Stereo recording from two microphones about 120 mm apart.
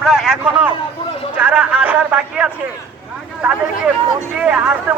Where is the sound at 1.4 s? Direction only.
10° right (ahead or behind).